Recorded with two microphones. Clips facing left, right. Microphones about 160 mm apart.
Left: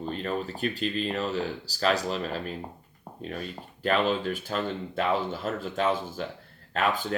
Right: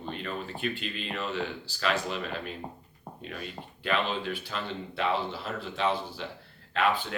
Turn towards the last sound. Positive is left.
turn(degrees=40)  # may be behind; listen again after turning